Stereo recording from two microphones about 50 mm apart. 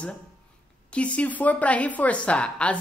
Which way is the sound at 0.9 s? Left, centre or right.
Left.